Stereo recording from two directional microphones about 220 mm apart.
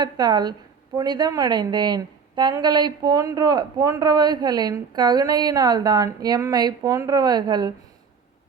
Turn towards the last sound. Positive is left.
turn(degrees=-20)  # may be behind; listen again after turning